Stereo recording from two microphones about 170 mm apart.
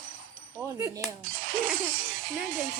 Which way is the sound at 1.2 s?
55° right (ahead or behind).